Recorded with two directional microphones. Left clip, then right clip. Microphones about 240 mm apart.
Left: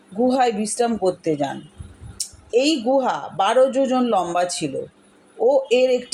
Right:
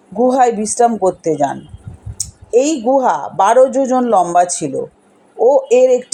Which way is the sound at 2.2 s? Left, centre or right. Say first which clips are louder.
Right 6 dB; centre.